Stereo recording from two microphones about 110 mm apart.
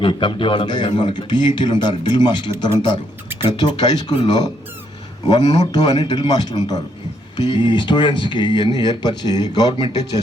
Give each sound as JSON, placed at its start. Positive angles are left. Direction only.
{"t": 0.0, "sound": "speech", "side_deg": 50}